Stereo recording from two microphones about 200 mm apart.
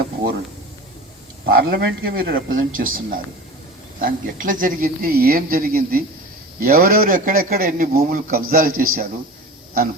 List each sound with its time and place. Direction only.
1.5 s a man's voice: 50° right (ahead or behind)